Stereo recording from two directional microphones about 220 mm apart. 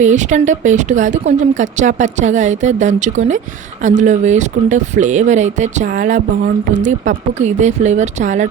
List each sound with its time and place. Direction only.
0.0 s speech: 35° right (ahead or behind)
7.4 s speech: 30° right (ahead or behind)